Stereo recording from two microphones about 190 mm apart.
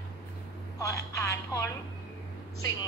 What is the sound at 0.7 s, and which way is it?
Speech, 15° left (ahead or behind).